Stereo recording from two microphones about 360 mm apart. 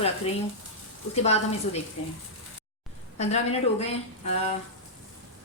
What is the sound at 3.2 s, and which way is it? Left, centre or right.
A woman's voice, centre.